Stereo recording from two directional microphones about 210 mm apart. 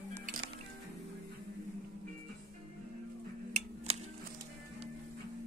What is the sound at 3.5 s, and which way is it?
Music, 30° right (ahead or behind).